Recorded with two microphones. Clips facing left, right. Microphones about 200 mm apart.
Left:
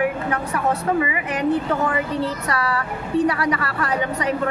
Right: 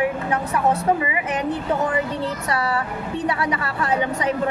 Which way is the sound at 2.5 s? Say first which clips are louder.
Even; 25° right (ahead or behind).